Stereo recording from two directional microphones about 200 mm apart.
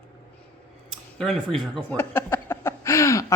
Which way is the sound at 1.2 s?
Centre (ahead or behind).